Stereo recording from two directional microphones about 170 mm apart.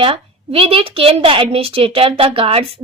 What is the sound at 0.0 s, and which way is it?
A woman's voice, 35° right (ahead or behind).